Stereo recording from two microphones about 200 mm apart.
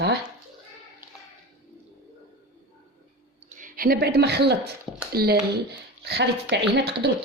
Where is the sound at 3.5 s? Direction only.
40° right (ahead or behind); by 6.9 s 60° right (ahead or behind).